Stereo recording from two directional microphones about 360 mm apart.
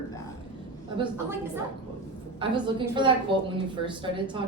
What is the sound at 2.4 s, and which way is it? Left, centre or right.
Speech, centre.